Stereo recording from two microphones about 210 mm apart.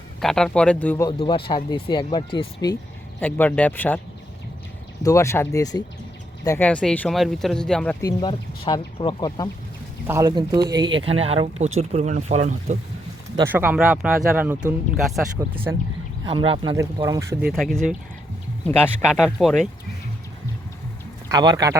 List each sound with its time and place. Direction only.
0.2 s speech: centre (ahead or behind)
1.2 s speech: 25° left (ahead or behind)
3.2 s speech: 10° left (ahead or behind)
5.0 s speech: 15° left (ahead or behind)
8.0 s speech: 20° left (ahead or behind)
10.1 s speech: 15° right (ahead or behind); by 12.7 s 35° right (ahead or behind)
13.4 s speech: 10° right (ahead or behind)
15.4 s speech: 15° right (ahead or behind)
17.4 s speech: centre (ahead or behind)
21.2 s speech: 20° right (ahead or behind)